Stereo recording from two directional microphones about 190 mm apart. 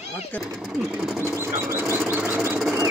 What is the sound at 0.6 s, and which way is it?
Speech, centre (ahead or behind).